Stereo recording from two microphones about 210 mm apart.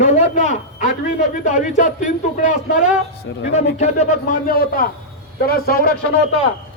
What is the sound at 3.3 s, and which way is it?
Speech, 55° left (ahead or behind).